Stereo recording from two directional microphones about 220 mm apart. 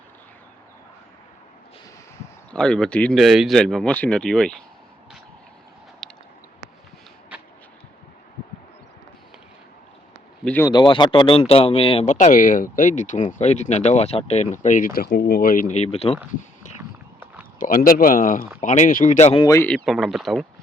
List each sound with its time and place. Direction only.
2.5 s speech: 5° left (ahead or behind)
6.0 s a sound: centre (ahead or behind)
10.4 s speech: 5° left (ahead or behind)
10.7 s speech: 20° left (ahead or behind)
16.7 s walk: 35° left (ahead or behind)
17.6 s speech: 40° left (ahead or behind)
19.5 s speech: 10° left (ahead or behind)